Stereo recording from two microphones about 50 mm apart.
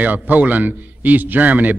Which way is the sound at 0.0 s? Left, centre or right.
Right.